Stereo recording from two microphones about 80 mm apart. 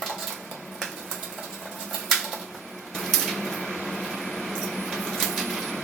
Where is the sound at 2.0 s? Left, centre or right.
Centre.